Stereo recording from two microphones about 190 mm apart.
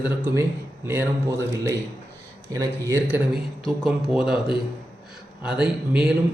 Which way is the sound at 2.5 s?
20° right (ahead or behind).